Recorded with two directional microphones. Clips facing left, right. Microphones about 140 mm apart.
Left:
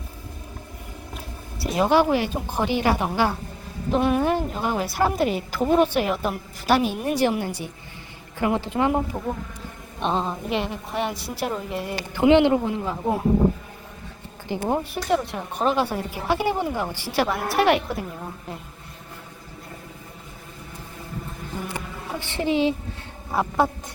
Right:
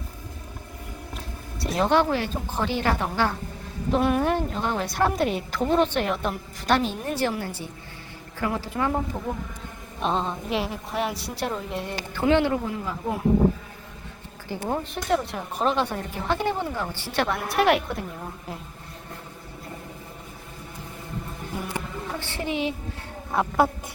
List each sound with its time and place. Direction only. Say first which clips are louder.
1.1 s speech: even; 5° left (ahead or behind)
3.9 s a woman's voice: left 1 dB; centre (ahead or behind)
12.1 s a man's voice: left 5 dB; 15° left (ahead or behind)
14.4 s speech: left 4 dB; 20° left (ahead or behind)
14.9 s a woman's voice: left 2 dB; centre (ahead or behind)
22.2 s a man's voice: left 7 dB; 25° left (ahead or behind)
23.3 s a woman's voice: even; centre (ahead or behind)